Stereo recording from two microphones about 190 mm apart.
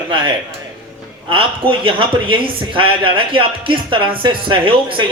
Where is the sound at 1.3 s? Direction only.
25° right (ahead or behind).